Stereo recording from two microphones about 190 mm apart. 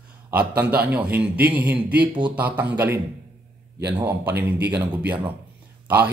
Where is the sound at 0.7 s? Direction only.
10° right (ahead or behind).